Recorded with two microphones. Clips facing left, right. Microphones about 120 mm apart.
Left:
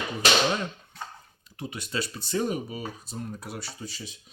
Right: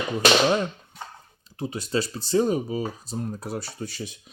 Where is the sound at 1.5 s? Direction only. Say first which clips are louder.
Right 6 dB; 35° right (ahead or behind).